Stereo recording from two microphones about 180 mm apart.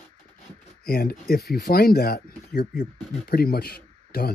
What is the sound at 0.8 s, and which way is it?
Speech, 60° left (ahead or behind).